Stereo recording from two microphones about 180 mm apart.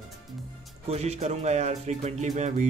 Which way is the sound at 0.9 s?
35° right (ahead or behind).